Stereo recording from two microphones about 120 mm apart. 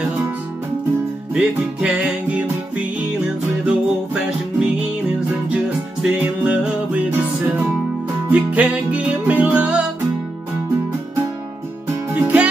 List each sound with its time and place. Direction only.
1.3 s music: 10° right (ahead or behind)
6.0 s music: 10° right (ahead or behind)
8.3 s music: 15° right (ahead or behind)
12.1 s music: 15° right (ahead or behind)